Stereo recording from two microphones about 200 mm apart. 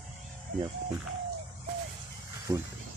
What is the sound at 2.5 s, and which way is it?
Speech, 20° right (ahead or behind).